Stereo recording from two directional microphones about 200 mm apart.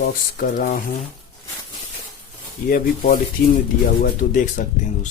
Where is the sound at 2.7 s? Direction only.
45° left (ahead or behind).